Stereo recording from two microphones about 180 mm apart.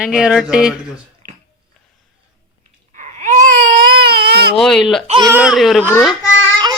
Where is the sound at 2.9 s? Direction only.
45° right (ahead or behind); by 4.5 s 65° right (ahead or behind).